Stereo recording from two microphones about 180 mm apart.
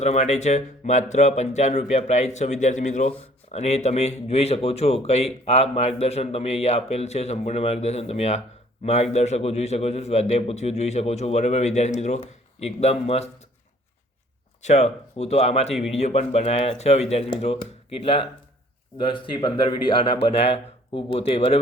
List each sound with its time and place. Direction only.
0.0 s a man's voice: 40° left (ahead or behind)
14.6 s a man's voice: 35° left (ahead or behind)